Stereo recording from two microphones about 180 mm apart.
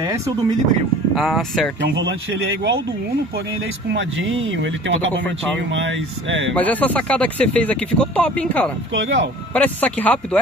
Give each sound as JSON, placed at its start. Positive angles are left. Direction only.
{"t": 1.1, "sound": "speech", "side_deg": 0}
{"t": 3.9, "sound": "speech", "side_deg": -90}
{"t": 6.5, "sound": "speech", "side_deg": 10}
{"t": 8.9, "sound": "speech", "side_deg": -90}
{"t": 9.5, "sound": "speech", "side_deg": 10}